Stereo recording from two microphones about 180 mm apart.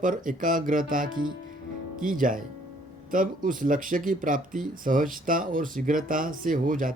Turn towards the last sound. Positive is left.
turn(degrees=-50)  # may be behind; listen again after turning